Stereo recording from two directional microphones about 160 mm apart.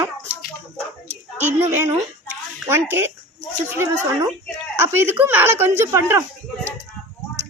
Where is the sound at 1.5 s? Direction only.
20° right (ahead or behind).